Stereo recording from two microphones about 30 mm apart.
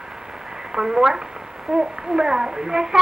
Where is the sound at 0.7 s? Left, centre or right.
Centre.